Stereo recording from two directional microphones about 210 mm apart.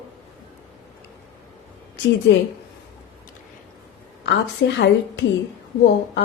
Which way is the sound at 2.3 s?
55° left (ahead or behind).